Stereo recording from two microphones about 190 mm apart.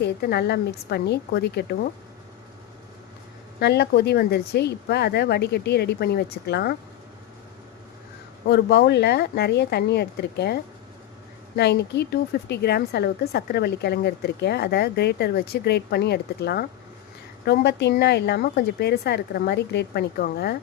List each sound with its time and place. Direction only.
0.0 s a woman's voice: 55° left (ahead or behind)
3.6 s a woman's voice: 60° left (ahead or behind)
8.4 s a woman's voice: 60° left (ahead or behind)